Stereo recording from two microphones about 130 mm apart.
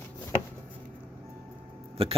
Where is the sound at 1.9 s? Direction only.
50° right (ahead or behind).